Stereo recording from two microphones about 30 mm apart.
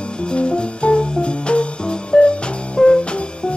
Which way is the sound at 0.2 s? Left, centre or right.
Left.